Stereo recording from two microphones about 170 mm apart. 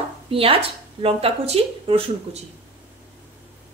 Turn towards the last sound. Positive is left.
turn(degrees=-35)  # may be behind; listen again after turning